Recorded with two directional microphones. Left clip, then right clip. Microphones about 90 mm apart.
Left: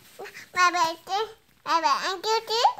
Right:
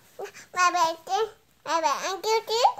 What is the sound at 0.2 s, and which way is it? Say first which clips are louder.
Child singing: left 1 dB; 45° right (ahead or behind).